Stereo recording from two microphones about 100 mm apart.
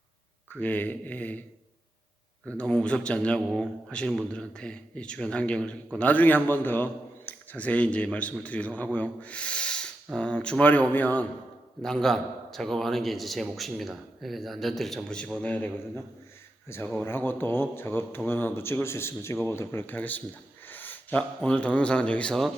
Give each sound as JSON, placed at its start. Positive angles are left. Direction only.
{"t": 0.5, "sound": "a man's voice", "side_deg": 15}
{"t": 2.6, "sound": "a man's voice", "side_deg": 10}
{"t": 11.8, "sound": "a man's voice", "side_deg": 5}